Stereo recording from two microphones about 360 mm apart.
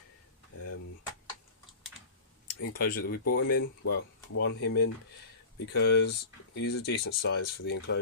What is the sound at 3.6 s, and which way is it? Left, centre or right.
Speech, left.